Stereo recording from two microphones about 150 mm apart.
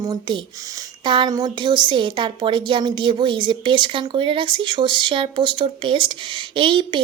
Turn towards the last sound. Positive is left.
turn(degrees=-35)  # may be behind; listen again after turning